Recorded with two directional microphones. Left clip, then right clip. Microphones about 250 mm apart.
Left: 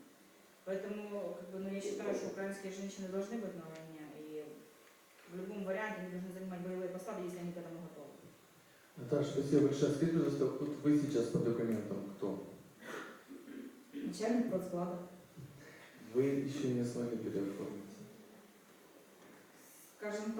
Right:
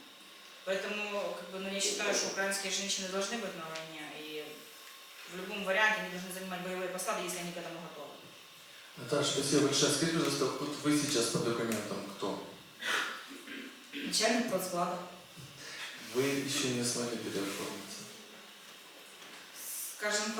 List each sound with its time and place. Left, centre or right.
0.7 s a man's voice: centre
9.0 s a man's voice: centre
11.9 s a sound: centre
12.8 s a sound: centre
15.8 s speech: centre
20.0 s a man's voice: centre